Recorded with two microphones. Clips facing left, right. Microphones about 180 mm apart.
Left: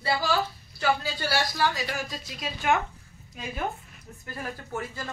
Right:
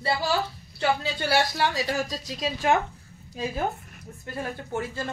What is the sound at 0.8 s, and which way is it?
A woman's voice, 25° right (ahead or behind).